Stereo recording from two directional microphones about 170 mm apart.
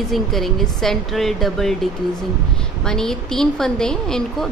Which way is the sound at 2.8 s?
5° left (ahead or behind).